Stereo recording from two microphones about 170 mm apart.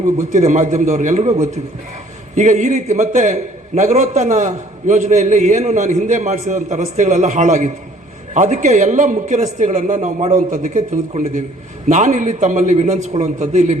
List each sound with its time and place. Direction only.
0.0 s a man's voice: 45° right (ahead or behind)